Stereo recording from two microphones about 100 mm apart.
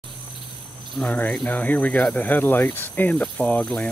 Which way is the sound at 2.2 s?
20° left (ahead or behind).